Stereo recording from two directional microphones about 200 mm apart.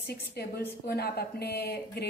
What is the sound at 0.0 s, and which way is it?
Speech, 50° left (ahead or behind).